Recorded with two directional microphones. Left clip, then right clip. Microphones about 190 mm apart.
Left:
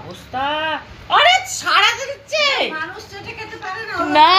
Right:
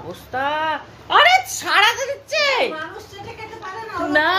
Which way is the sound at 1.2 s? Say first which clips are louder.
Even; 30° right (ahead or behind).